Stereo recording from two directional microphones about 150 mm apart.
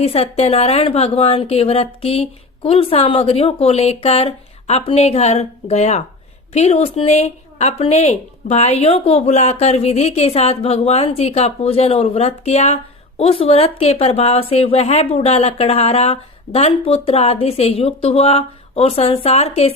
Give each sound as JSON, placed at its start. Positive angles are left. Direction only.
{"t": 0.0, "sound": "a woman's voice", "side_deg": 40}